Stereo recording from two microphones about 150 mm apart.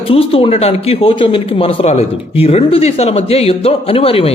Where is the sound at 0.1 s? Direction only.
40° left (ahead or behind).